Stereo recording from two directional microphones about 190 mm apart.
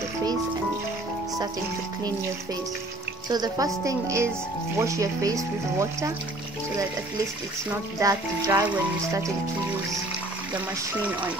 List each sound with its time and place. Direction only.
3.3 s speech: 20° right (ahead or behind)
7.7 s speech: 15° right (ahead or behind)